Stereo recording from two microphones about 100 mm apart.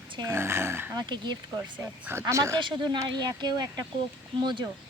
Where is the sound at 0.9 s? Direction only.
45° right (ahead or behind).